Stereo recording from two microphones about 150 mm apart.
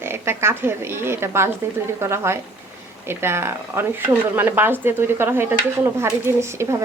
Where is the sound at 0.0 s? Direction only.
15° right (ahead or behind).